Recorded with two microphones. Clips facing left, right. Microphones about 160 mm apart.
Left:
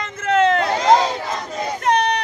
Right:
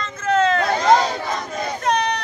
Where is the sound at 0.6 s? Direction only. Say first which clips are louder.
Left 1 dB; 20° left (ahead or behind).